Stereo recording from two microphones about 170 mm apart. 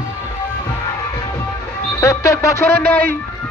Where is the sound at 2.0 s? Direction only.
20° left (ahead or behind).